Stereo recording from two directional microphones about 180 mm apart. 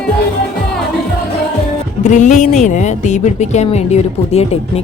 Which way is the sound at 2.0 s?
40° left (ahead or behind).